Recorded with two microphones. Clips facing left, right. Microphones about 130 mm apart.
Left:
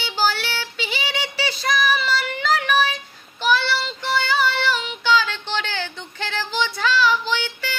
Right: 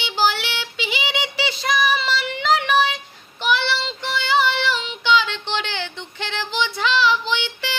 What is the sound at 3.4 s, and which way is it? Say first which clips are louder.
Child singing: left 1 dB; 20° right (ahead or behind).